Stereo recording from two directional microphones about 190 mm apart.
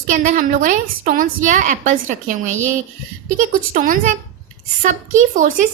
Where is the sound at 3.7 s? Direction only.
45° right (ahead or behind).